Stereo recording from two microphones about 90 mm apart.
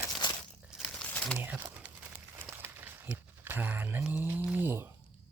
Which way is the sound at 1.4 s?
20° right (ahead or behind).